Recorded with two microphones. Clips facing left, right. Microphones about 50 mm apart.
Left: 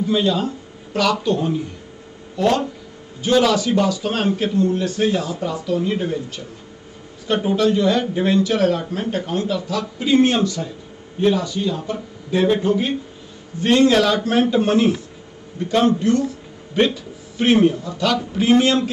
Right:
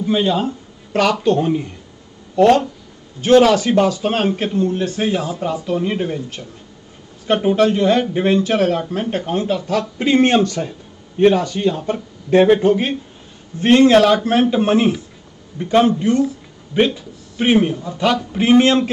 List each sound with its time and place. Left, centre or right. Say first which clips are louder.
0.0 s speech: right 2 dB; right
1.2 s a man's voice: right 4 dB; right